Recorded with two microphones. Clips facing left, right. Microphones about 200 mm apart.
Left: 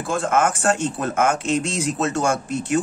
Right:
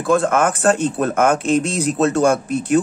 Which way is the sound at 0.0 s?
60° right (ahead or behind).